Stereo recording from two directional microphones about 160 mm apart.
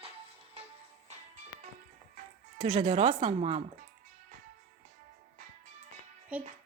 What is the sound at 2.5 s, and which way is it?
Speech, 35° right (ahead or behind).